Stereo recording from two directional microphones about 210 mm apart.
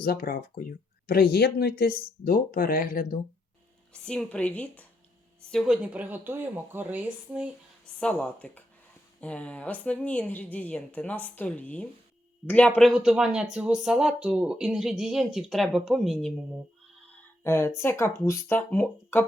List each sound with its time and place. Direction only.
0.0 s speech: 45° left (ahead or behind)
3.9 s a woman's voice: 5° left (ahead or behind)
7.9 s a woman's voice: 5° left (ahead or behind)
17.4 s a woman's voice: 10° left (ahead or behind)